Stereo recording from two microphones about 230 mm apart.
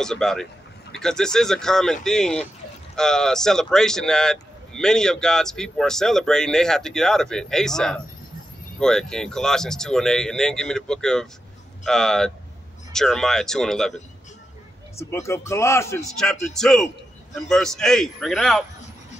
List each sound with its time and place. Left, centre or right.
0.0 s speech: centre
15.0 s speech: centre